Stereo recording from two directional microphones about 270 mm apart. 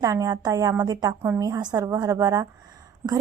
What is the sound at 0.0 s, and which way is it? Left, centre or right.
A woman's voice, centre.